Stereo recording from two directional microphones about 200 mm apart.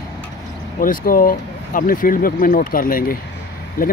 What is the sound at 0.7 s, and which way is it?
Speech, 45° left (ahead or behind).